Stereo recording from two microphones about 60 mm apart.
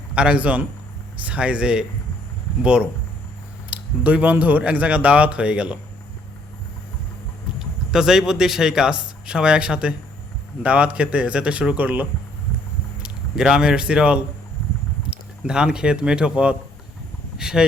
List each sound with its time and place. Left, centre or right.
0.1 s speech: centre
7.6 s speech: centre; by 12.0 s right
13.0 s speech: centre